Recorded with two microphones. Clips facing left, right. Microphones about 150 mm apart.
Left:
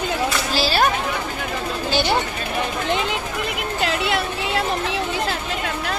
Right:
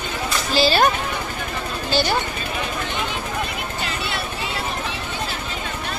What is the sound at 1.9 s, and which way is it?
Speech, 25° left (ahead or behind).